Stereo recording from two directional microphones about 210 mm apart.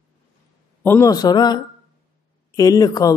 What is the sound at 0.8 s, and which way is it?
A woman's voice, 10° left (ahead or behind).